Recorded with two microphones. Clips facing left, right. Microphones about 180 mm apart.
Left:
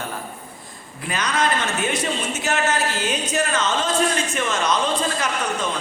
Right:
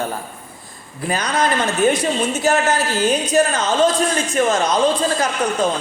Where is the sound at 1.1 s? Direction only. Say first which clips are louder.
Right 3 dB; 35° right (ahead or behind).